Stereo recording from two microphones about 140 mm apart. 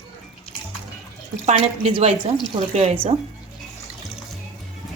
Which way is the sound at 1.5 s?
45° right (ahead or behind).